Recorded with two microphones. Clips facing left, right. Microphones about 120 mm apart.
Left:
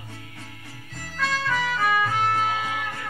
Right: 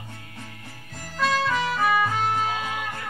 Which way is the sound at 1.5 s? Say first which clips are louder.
Right 1 dB; 20° right (ahead or behind).